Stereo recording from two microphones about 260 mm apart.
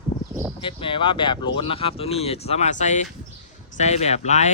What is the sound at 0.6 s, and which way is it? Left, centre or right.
Speech, centre.